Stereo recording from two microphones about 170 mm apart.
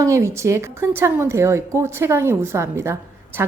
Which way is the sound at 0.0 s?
15° right (ahead or behind).